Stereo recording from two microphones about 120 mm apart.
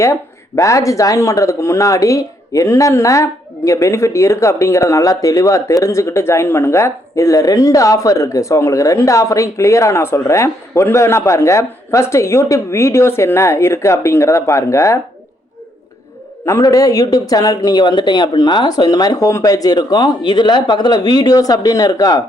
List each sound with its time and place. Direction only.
0.0 s speech: 25° left (ahead or behind)
16.5 s speech: 30° left (ahead or behind)